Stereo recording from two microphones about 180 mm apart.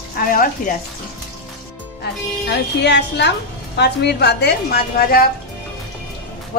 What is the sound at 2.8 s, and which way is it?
A woman's voice, 70° left (ahead or behind).